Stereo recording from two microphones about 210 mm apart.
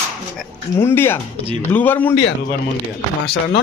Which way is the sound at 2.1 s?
55° left (ahead or behind).